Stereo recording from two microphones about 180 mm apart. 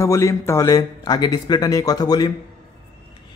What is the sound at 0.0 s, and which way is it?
Speech, 15° left (ahead or behind).